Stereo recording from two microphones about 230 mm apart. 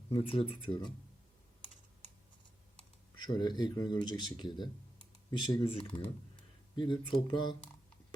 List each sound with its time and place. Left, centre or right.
0.1 s speech: left
3.2 s speech: centre